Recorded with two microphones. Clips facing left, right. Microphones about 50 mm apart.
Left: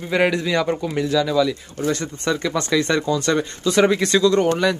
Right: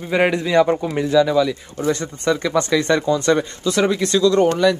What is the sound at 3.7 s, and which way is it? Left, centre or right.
Speech, left.